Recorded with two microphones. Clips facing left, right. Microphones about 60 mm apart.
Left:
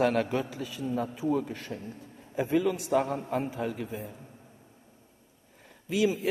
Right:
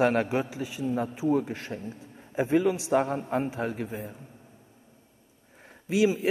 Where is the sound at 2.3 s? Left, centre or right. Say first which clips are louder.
Right 3 dB; right.